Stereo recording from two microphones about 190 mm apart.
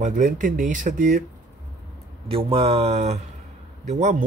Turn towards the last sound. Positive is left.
turn(degrees=-40)  # may be behind; listen again after turning